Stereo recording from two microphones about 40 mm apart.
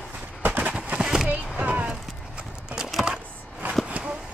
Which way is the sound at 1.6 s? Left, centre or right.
Right.